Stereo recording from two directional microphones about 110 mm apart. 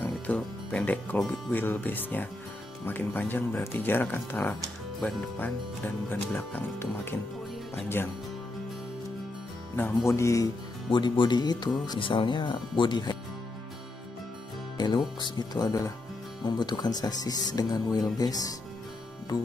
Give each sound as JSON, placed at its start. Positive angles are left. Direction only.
{"t": 0.0, "sound": "speech", "side_deg": 10}
{"t": 6.0, "sound": "speech", "side_deg": 15}
{"t": 9.8, "sound": "speech", "side_deg": 25}
{"t": 10.9, "sound": "speech", "side_deg": 45}
{"t": 14.8, "sound": "music", "side_deg": 40}
{"t": 15.1, "sound": "speech", "side_deg": 40}